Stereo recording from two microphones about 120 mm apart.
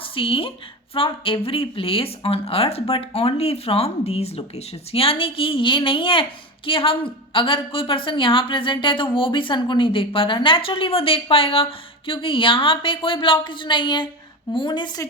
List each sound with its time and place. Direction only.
0.0 s a woman's voice: 50° left (ahead or behind)